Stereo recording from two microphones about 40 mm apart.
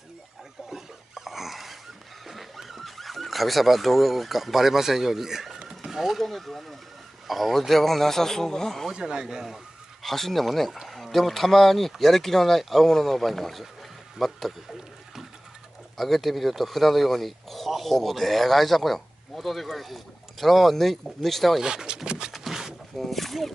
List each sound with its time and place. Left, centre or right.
0.7 s dog: centre
2.2 s speech: centre
5.7 s horse: centre
6.2 s speech: centre
8.9 s speech: centre
10.0 s speech: centre
21.5 s a sound: centre
22.3 s a sound: centre
22.9 s speech: centre